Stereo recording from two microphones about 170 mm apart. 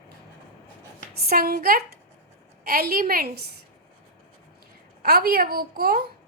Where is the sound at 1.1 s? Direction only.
65° right (ahead or behind).